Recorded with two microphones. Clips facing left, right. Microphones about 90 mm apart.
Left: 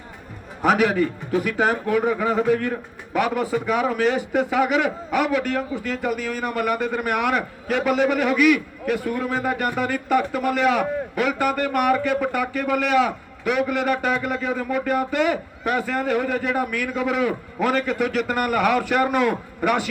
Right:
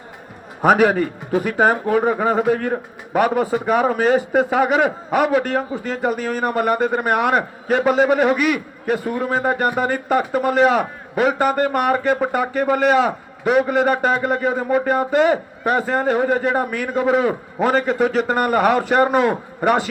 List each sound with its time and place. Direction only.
0.6 s a man's voice: 40° right (ahead or behind)